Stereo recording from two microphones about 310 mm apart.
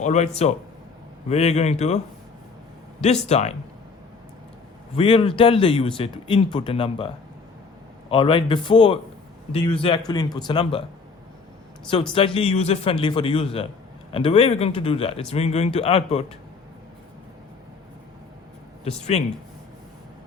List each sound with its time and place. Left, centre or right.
0.0 s speech: left
3.2 s speech: left
4.9 s speech: centre
8.1 s speech: centre
12.1 s speech: centre
18.9 s speech: left